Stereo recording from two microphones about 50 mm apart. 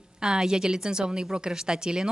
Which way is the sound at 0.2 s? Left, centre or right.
Centre.